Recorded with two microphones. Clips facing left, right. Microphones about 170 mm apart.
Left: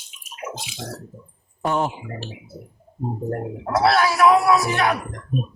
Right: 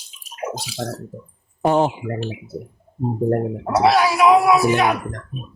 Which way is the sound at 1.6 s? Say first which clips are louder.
Right 6 dB; 25° right (ahead or behind).